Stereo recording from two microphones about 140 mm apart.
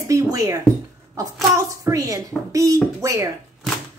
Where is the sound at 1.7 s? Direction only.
25° right (ahead or behind).